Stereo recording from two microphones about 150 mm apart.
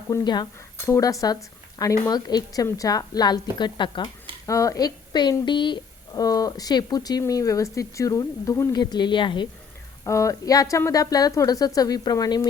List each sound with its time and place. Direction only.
0.1 s a woman's voice: 30° left (ahead or behind)
10.0 s a woman's voice: 20° left (ahead or behind)